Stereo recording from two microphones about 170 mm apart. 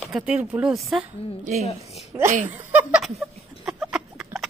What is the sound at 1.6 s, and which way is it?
Speech, 35° left (ahead or behind).